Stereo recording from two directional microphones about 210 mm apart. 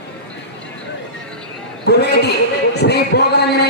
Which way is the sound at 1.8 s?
50° left (ahead or behind).